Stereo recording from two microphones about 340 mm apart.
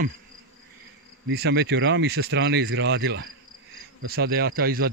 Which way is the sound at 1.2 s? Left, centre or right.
Right.